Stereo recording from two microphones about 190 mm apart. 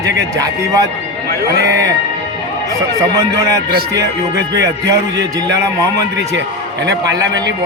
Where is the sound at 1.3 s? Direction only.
55° right (ahead or behind).